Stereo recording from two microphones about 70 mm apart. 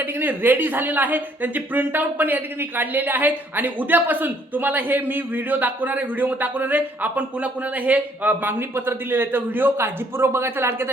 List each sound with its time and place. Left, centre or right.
0.0 s speech: right